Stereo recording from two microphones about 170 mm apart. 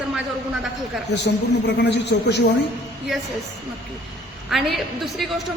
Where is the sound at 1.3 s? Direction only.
85° left.